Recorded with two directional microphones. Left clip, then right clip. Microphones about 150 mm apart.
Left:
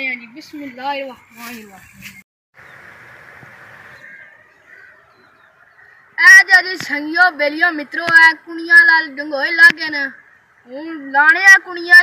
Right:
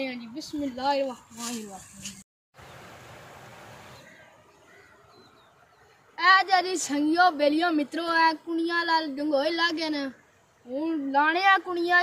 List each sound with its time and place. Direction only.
0.0 s speech: 10° left (ahead or behind)
6.1 s a sound: 30° right (ahead or behind)
11.1 s speech: 30° right (ahead or behind)